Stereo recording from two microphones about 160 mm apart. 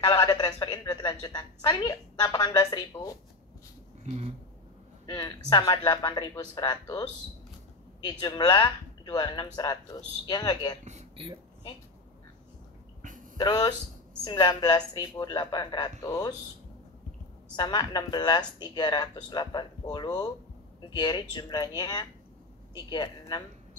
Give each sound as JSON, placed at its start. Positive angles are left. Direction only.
{"t": 0.0, "sound": "a woman's voice", "side_deg": 25}
{"t": 4.0, "sound": "a sound", "side_deg": -45}
{"t": 5.0, "sound": "a woman's voice", "side_deg": 25}
{"t": 8.1, "sound": "a woman's voice", "side_deg": 25}
{"t": 10.9, "sound": "speech", "side_deg": -45}
{"t": 13.0, "sound": "a sound", "side_deg": -55}
{"t": 13.4, "sound": "a woman's voice", "side_deg": 25}
{"t": 17.6, "sound": "a woman's voice", "side_deg": 25}